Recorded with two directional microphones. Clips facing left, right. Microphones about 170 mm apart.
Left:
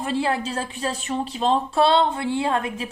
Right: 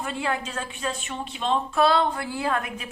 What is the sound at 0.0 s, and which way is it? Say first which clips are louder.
A woman's voice: left 5 dB; 35° left (ahead or behind).